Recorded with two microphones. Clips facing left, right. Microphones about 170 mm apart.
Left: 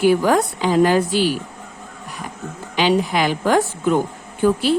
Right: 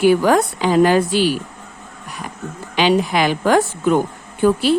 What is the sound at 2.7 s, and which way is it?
Speech, 75° right (ahead or behind).